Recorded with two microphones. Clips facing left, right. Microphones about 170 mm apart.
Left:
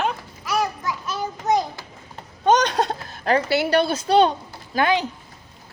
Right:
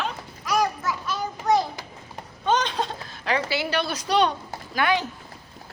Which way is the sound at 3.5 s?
60° left (ahead or behind).